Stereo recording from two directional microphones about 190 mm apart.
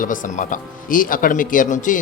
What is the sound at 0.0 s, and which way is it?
Speech, 45° left (ahead or behind).